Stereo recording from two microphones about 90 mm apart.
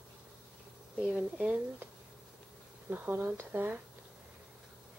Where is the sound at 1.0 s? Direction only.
5° right (ahead or behind).